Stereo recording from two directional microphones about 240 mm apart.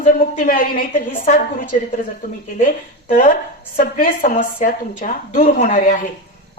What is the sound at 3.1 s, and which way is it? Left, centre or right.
A woman's voice, left.